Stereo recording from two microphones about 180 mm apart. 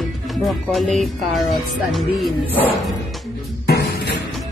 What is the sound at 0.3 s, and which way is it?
Speech, centre (ahead or behind).